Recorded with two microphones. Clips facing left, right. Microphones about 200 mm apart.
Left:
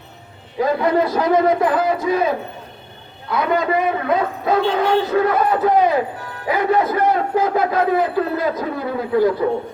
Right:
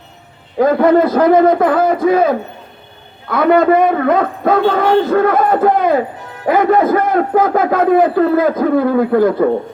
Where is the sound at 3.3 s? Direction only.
55° right (ahead or behind).